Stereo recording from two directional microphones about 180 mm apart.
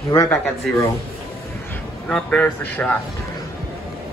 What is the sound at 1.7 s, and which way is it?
A man's voice, 5° left (ahead or behind).